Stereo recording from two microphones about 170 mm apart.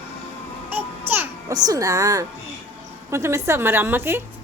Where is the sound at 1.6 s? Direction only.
20° right (ahead or behind).